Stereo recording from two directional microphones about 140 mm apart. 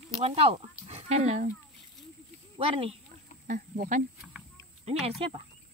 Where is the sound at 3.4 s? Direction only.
75° right (ahead or behind).